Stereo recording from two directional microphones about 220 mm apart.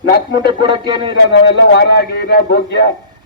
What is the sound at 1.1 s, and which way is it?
A man's voice, 50° left (ahead or behind).